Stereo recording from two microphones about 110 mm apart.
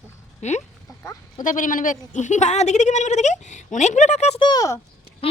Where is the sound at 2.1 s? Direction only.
90° left.